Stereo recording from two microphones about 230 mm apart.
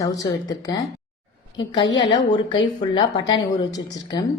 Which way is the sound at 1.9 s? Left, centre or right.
Left.